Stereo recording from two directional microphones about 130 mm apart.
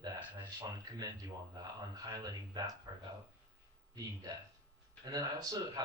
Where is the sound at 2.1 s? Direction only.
25° right (ahead or behind).